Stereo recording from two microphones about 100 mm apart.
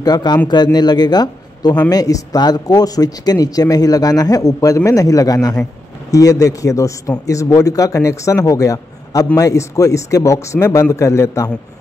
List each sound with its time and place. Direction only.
0.0 s a man's voice: 45° left (ahead or behind)